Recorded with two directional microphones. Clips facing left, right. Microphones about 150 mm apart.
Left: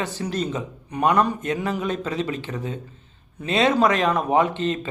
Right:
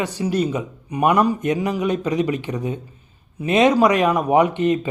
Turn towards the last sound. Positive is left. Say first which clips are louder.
# right 5 dB
turn(degrees=-15)  # may be behind; listen again after turning